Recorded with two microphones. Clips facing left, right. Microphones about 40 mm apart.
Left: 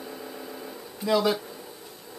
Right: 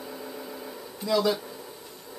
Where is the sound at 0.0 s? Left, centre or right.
Centre.